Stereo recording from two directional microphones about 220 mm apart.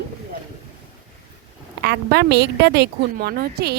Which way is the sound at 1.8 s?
50° right (ahead or behind).